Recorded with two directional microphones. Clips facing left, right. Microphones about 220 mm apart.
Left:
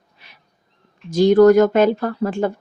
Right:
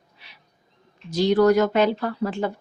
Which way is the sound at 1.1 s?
50° left (ahead or behind).